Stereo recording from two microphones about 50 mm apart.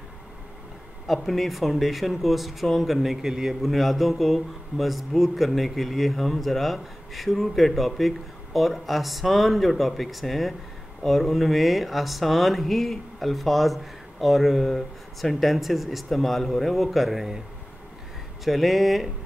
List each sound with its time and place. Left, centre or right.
1.0 s speech: centre
18.4 s speech: centre